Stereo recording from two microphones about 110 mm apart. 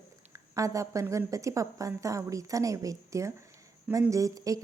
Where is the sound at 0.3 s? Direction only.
30° right (ahead or behind).